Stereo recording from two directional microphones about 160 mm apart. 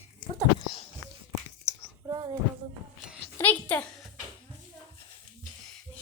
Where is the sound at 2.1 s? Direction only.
15° right (ahead or behind).